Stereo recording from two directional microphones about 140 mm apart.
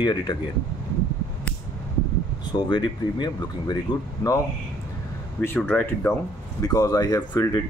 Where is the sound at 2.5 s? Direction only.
30° left (ahead or behind).